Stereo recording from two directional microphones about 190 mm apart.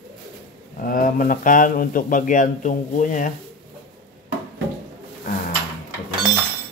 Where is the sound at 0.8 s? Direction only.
50° left (ahead or behind).